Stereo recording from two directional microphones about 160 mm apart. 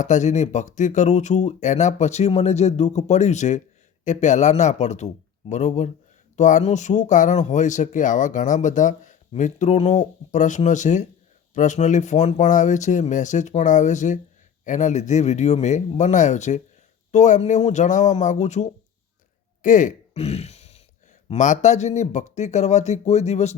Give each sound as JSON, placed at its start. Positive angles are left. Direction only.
{"t": 0.0, "sound": "speech", "side_deg": 50}